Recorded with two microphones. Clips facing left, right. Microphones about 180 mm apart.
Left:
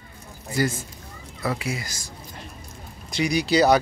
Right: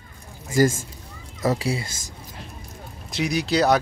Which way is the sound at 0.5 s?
45° right (ahead or behind).